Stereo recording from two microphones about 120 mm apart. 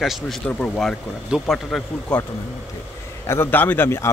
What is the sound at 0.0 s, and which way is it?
A man's voice, centre (ahead or behind).